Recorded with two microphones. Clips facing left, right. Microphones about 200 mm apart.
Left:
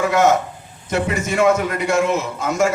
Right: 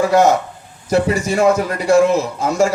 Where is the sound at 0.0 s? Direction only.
35° right (ahead or behind).